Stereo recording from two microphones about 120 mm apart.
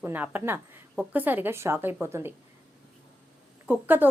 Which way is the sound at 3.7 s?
15° right (ahead or behind).